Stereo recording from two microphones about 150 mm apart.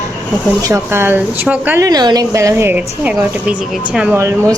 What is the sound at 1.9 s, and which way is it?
A woman's voice, 25° right (ahead or behind).